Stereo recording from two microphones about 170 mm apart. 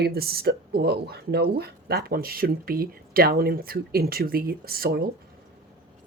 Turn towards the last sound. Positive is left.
turn(degrees=-60)  # may be behind; listen again after turning